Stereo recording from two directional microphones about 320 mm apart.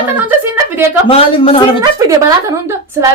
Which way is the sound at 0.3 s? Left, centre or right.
Centre.